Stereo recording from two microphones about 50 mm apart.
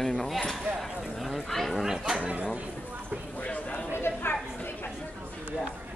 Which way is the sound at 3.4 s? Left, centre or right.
Left.